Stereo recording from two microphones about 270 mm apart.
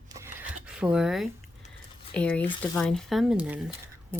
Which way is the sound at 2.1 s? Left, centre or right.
Centre.